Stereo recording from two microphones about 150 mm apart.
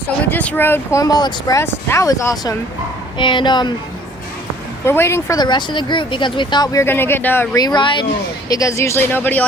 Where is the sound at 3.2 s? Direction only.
30° left (ahead or behind).